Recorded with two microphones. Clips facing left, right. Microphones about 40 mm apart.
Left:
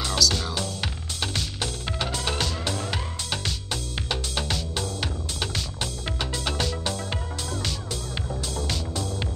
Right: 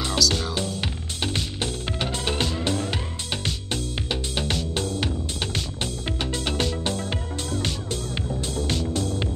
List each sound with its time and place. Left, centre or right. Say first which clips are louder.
0.2 s speech: even; centre
0.6 s music: right 2 dB; right